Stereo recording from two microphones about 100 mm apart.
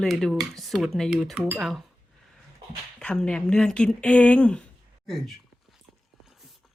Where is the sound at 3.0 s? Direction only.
10° left (ahead or behind).